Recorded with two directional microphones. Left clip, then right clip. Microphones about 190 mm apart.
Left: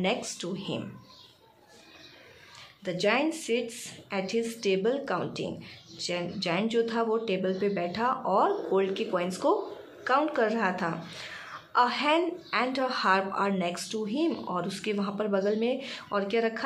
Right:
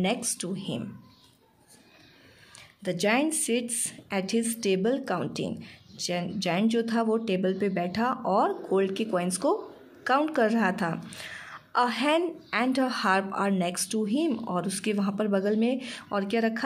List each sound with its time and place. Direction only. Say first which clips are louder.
0.0 s speech: even; 40° right (ahead or behind)
2.8 s a woman's voice: right 1 dB; 45° right (ahead or behind)